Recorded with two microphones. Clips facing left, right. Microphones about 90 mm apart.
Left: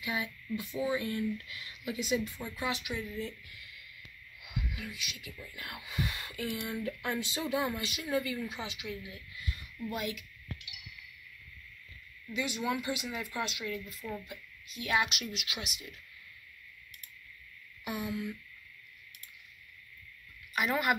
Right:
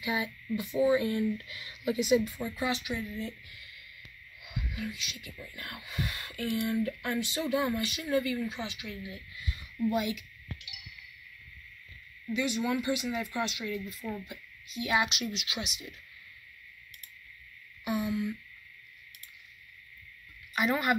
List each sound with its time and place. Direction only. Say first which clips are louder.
0.0 s speech: right 4 dB; 10° right (ahead or behind)
2.0 s speech: right 6 dB; 10° right (ahead or behind)
4.4 s whispering: right 3 dB; 5° left (ahead or behind)
5.2 s speech: right 1 dB; 10° left (ahead or behind)
9.1 s speech: right 2 dB; 5° right (ahead or behind)
12.4 s speech: right 3 dB; 10° left (ahead or behind)
17.8 s speech: right 5 dB; centre (ahead or behind)
20.5 s speech: right 2 dB; centre (ahead or behind)